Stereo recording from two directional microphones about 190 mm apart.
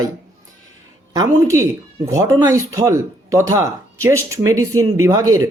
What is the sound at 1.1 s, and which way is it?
Speech, 15° right (ahead or behind).